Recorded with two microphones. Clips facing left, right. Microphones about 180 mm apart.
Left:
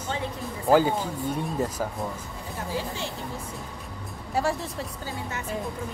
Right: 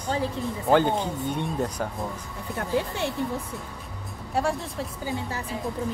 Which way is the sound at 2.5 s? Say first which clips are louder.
Right 5 dB; 60° right (ahead or behind).